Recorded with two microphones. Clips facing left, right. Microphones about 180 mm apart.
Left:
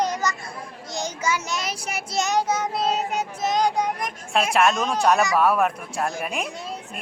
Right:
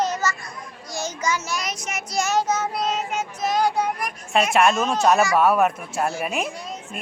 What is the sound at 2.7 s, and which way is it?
Child singing, 30° left (ahead or behind).